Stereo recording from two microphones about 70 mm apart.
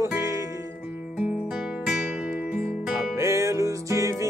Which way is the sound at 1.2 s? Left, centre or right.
Centre.